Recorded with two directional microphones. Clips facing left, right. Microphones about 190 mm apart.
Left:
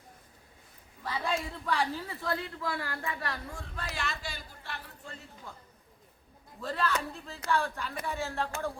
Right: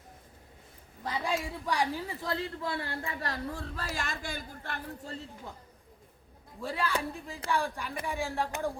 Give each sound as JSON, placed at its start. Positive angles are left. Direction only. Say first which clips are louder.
{"t": 1.0, "sound": "a woman's voice", "louder": "right 1 dB", "side_deg": -15}
{"t": 5.1, "sound": "speech", "louder": "right 4 dB", "side_deg": -40}
{"t": 6.6, "sound": "a man's voice", "louder": "even", "side_deg": -10}